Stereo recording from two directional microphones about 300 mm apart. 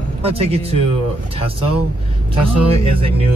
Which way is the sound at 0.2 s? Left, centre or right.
Centre.